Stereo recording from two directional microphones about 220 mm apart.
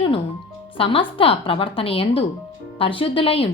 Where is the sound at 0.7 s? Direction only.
25° left (ahead or behind).